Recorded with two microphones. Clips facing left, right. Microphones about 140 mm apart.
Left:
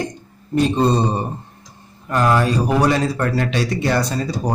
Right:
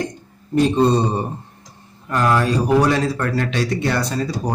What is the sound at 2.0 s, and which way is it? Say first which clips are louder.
A man's voice: left 1 dB; 5° left (ahead or behind).